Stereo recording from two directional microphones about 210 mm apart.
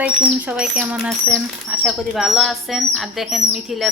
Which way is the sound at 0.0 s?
5° right (ahead or behind).